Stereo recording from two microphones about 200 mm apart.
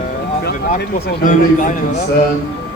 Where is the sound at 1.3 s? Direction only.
40° left (ahead or behind).